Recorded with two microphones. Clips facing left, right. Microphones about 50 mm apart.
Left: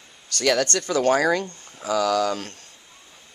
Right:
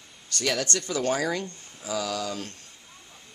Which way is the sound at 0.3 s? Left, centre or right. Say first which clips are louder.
Left 6 dB; left.